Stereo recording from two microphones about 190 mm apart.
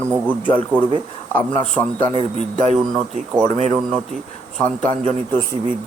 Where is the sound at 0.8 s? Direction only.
25° right (ahead or behind).